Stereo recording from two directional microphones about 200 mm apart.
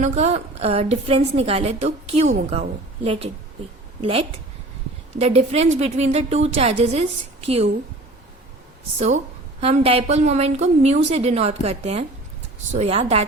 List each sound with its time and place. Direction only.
0.0 s a woman's voice: 35° right (ahead or behind)
9.0 s a woman's voice: 35° right (ahead or behind)